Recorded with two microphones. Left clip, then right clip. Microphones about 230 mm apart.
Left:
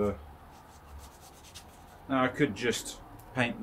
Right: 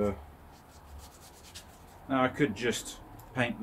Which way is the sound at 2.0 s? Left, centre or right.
Centre.